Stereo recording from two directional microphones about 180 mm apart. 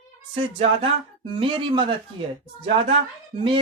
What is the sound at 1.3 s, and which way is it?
Speech, 30° right (ahead or behind).